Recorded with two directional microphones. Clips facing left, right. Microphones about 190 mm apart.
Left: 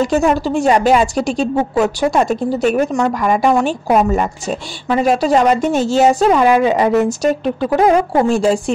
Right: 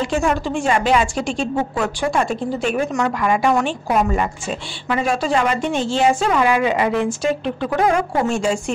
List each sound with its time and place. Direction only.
0.0 s a woman's voice: 35° left (ahead or behind)